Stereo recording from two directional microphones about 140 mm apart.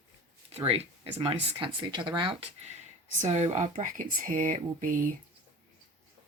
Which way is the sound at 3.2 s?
50° right (ahead or behind).